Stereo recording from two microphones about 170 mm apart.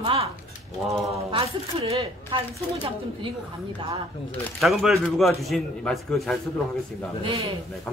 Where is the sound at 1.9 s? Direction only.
30° right (ahead or behind).